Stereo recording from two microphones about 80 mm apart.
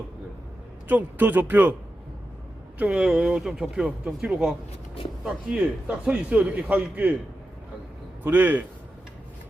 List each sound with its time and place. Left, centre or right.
0.9 s speech: right
2.7 s a man's voice: centre
8.2 s speech: right